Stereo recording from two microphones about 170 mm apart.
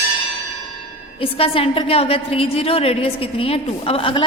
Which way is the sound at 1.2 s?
35° left (ahead or behind).